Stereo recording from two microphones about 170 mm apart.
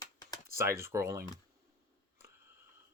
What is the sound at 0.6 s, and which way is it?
Speech, 15° right (ahead or behind).